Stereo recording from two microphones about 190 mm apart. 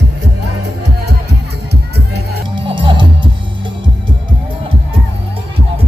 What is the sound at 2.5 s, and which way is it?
Music, 25° right (ahead or behind).